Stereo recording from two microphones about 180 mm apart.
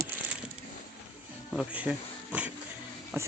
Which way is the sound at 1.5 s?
5° right (ahead or behind).